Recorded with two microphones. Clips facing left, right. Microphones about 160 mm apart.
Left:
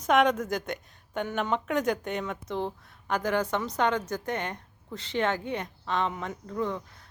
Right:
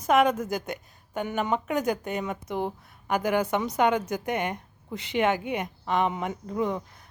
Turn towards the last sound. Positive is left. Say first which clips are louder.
# right 3 dB
turn(degrees=-15)  # may be behind; listen again after turning